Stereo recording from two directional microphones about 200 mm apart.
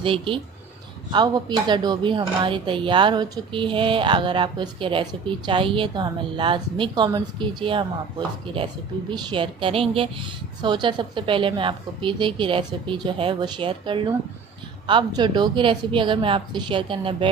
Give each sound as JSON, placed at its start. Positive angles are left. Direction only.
{"t": 0.0, "sound": "speech", "side_deg": -25}